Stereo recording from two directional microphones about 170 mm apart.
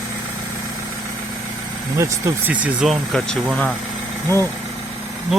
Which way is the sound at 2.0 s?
15° right (ahead or behind).